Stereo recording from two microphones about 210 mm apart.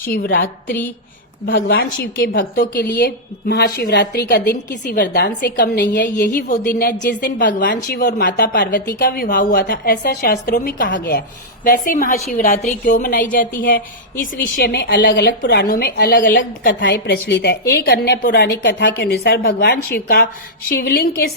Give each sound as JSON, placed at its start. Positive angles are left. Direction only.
{"t": 0.1, "sound": "a woman's voice", "side_deg": 45}
{"t": 14.5, "sound": "a woman's voice", "side_deg": 50}